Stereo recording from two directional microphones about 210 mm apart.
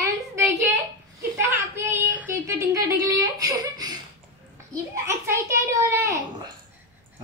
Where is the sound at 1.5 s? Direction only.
10° right (ahead or behind).